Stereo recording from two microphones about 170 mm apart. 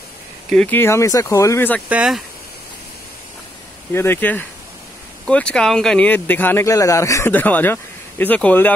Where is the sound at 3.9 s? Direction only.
15° left (ahead or behind).